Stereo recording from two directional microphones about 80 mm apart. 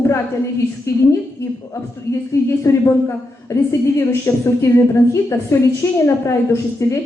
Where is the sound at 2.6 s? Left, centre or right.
Left.